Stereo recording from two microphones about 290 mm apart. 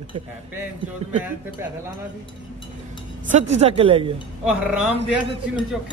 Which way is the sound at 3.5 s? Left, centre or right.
Right.